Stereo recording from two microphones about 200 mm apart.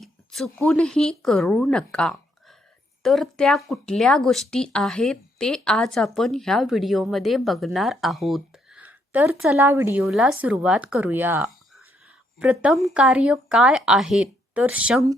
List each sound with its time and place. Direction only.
0.0 s speech: centre (ahead or behind)